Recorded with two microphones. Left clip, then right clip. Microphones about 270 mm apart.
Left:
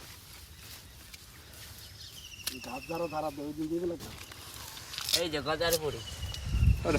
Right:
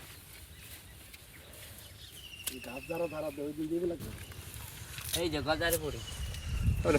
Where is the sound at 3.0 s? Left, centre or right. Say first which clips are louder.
Left 2 dB; left.